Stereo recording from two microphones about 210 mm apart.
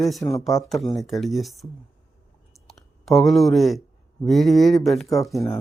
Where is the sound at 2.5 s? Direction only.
Centre (ahead or behind).